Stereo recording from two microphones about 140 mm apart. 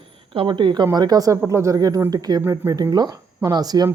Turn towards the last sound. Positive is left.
turn(degrees=-25)  # may be behind; listen again after turning